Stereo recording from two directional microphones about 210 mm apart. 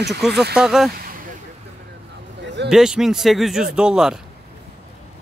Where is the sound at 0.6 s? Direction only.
Centre (ahead or behind).